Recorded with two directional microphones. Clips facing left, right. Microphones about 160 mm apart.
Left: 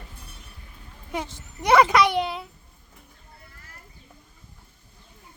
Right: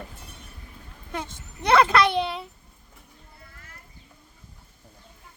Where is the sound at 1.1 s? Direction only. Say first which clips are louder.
Left 2 dB; 10° left (ahead or behind).